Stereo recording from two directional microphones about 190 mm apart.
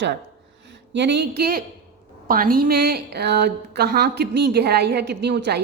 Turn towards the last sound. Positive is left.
turn(degrees=-60)  # may be behind; listen again after turning